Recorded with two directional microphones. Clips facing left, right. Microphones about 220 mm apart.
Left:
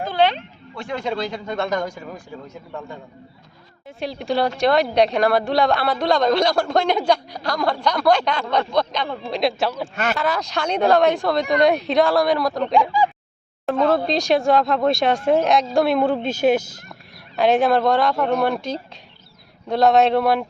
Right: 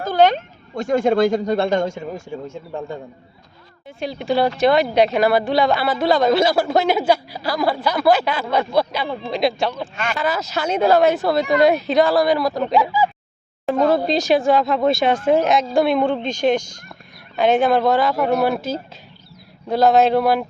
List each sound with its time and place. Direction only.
0.0 s speech: 45° right (ahead or behind)
1.5 s a man's voice: 30° right (ahead or behind)
4.0 s a woman's voice: centre (ahead or behind)